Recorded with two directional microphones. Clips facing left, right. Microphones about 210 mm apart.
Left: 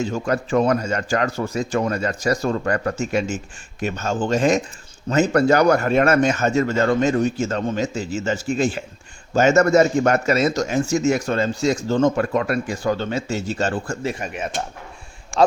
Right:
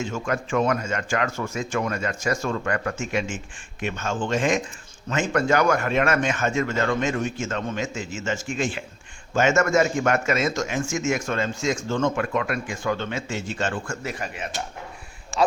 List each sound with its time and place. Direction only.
0.0 s a man's voice: 35° left (ahead or behind)